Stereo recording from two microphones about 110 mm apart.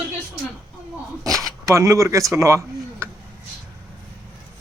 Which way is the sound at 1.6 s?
30° right (ahead or behind).